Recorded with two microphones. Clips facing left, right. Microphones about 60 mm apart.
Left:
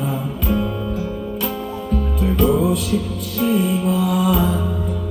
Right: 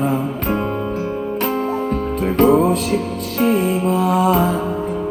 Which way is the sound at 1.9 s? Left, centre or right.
Right.